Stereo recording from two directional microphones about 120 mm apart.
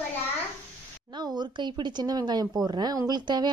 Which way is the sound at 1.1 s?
35° right (ahead or behind).